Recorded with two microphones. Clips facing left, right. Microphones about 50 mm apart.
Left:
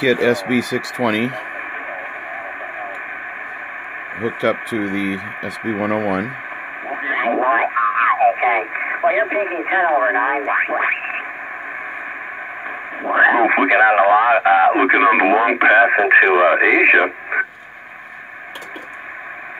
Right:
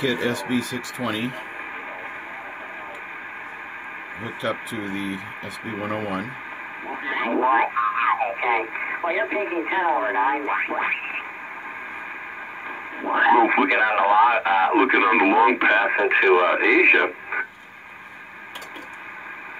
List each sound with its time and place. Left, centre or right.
0.0 s speech: left
4.2 s speech: left
7.0 s radio: left
7.3 s speech: left
13.1 s speech: left